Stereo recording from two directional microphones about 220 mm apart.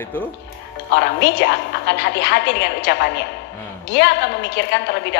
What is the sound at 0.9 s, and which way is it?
A woman's voice, 50° left (ahead or behind).